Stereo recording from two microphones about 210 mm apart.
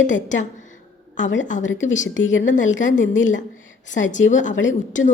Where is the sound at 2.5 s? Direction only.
35° left (ahead or behind).